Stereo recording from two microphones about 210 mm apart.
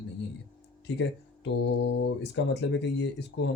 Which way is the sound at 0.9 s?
55° left (ahead or behind).